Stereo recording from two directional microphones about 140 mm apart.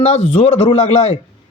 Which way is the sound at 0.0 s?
55° left (ahead or behind).